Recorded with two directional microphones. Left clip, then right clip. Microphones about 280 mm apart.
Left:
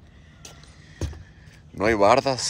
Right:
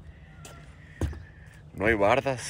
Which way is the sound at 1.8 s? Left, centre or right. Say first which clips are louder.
Left 5 dB; centre.